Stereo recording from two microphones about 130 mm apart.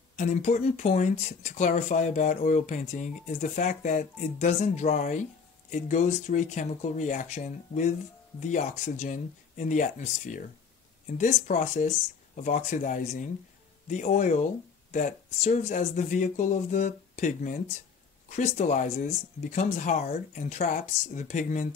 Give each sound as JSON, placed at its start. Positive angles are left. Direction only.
{"t": 0.1, "sound": "speech", "side_deg": 70}
{"t": 18.3, "sound": "speech", "side_deg": 65}